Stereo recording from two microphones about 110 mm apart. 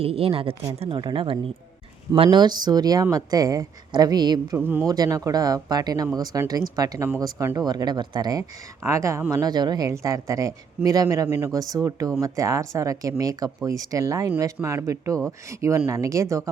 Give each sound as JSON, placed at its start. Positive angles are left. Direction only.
{"t": 0.0, "sound": "speech", "side_deg": -60}
{"t": 0.8, "sound": "speech", "side_deg": -50}
{"t": 4.5, "sound": "speech", "side_deg": -20}
{"t": 4.9, "sound": "speech", "side_deg": -35}
{"t": 8.8, "sound": "speech", "side_deg": -25}